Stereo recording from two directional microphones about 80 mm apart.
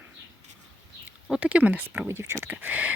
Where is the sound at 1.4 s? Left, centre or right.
Centre.